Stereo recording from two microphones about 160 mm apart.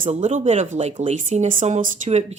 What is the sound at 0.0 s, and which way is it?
Speech, 45° right (ahead or behind).